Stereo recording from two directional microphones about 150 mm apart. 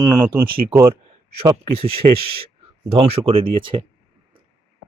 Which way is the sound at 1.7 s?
40° right (ahead or behind).